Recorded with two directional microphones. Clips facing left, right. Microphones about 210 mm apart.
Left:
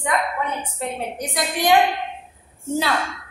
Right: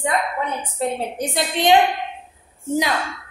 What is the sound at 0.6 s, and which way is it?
A woman's voice, 30° right (ahead or behind).